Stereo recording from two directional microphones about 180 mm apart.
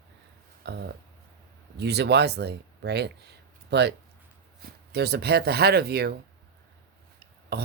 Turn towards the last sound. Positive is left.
turn(degrees=-65)  # may be behind; listen again after turning